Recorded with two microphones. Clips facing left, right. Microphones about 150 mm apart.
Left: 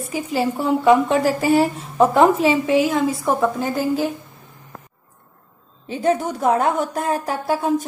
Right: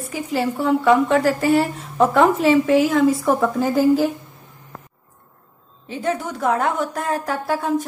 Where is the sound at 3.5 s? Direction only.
5° right (ahead or behind).